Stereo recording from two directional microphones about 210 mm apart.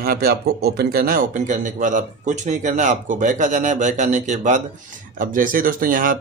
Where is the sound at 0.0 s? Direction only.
45° right (ahead or behind).